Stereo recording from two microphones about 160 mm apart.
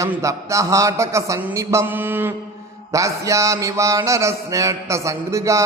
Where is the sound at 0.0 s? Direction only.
20° right (ahead or behind).